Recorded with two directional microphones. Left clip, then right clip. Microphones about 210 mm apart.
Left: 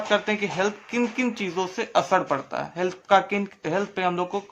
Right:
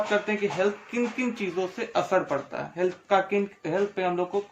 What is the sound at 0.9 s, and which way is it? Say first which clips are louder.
Speech: left 3 dB; 25° left (ahead or behind).